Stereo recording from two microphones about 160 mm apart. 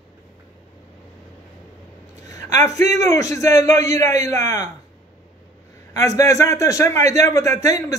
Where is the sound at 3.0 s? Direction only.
20° left (ahead or behind).